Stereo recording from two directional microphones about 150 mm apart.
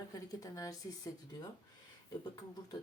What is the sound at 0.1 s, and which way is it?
Speech, 25° left (ahead or behind).